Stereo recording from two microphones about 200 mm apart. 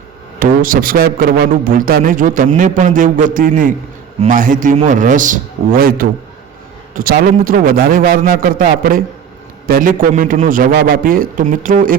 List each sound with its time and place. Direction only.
0.3 s a man's voice: 45° right (ahead or behind)